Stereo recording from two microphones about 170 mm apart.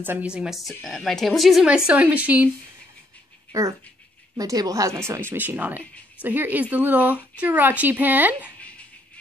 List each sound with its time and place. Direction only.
0.0 s a woman's voice: 10° right (ahead or behind)
3.5 s a woman's voice: 20° right (ahead or behind)